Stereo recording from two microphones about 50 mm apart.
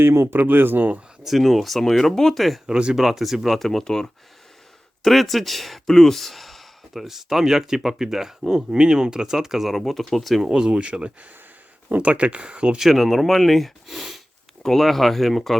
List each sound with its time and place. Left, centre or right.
0.0 s speech: right
0.3 s speech: right
1.2 s speech: centre
2.6 s speech: centre
2.9 s speech: centre
5.0 s speech: centre
10.5 s speech: centre
12.8 s speech: centre